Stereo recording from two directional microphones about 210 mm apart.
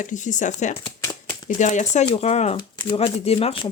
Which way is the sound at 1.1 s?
10° left (ahead or behind).